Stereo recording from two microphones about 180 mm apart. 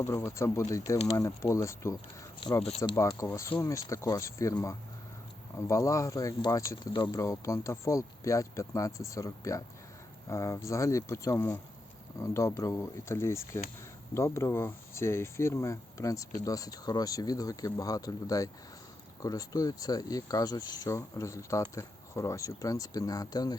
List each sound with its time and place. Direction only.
0.0 s speech: 15° left (ahead or behind)
2.6 s speech: 35° left (ahead or behind)
2.9 s speech: 15° left (ahead or behind)